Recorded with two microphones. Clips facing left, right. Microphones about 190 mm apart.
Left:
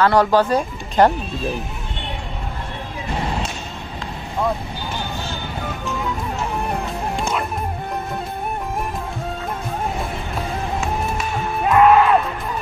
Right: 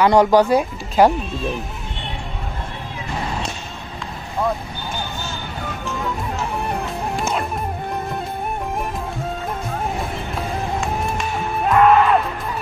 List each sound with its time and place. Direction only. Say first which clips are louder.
0.0 s speech: right 2 dB; 15° right (ahead or behind)
10.8 s music: even; 5° left (ahead or behind)